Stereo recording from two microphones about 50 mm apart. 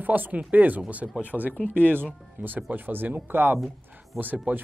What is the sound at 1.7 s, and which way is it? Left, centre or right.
Speech, right.